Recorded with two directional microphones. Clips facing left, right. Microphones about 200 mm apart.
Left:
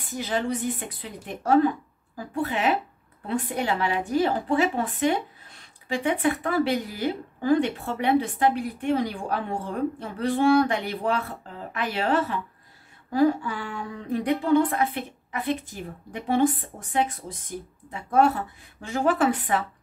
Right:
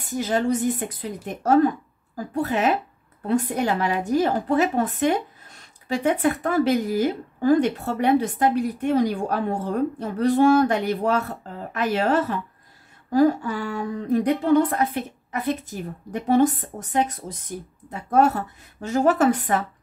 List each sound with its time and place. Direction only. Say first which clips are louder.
0.0 s a woman's voice: right 5 dB; 45° right (ahead or behind)